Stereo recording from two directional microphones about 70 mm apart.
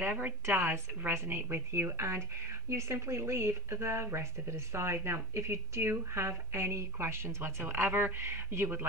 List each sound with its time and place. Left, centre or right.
0.0 s speech: right